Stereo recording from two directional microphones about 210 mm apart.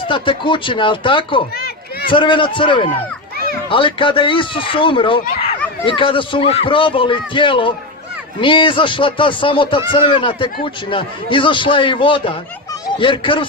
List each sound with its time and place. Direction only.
0.0 s a man's voice: 25° left (ahead or behind)
1.5 s run: 50° left (ahead or behind)
2.0 s a man's voice: 25° left (ahead or behind)